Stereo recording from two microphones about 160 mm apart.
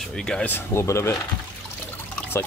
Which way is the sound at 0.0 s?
5° left (ahead or behind).